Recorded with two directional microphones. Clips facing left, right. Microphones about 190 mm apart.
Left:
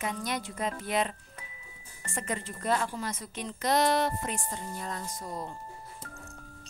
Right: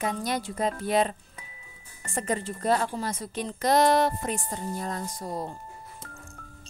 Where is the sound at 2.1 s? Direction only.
35° right (ahead or behind).